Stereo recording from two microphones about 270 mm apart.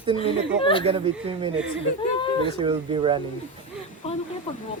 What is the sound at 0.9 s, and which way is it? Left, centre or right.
Speech, centre.